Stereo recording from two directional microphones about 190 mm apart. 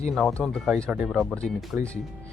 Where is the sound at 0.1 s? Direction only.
Centre (ahead or behind).